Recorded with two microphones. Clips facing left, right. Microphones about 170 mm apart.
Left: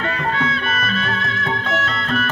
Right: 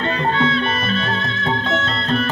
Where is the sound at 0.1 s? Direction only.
30° right (ahead or behind).